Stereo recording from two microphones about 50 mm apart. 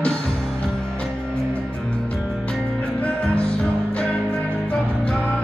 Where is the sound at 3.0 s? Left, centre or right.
Left.